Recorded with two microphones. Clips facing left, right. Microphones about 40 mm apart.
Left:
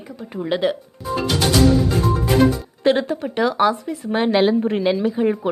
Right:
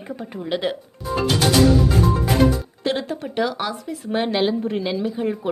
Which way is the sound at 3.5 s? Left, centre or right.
Centre.